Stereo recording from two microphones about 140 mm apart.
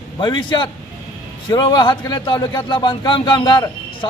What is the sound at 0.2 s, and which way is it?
A man's voice, 35° left (ahead or behind).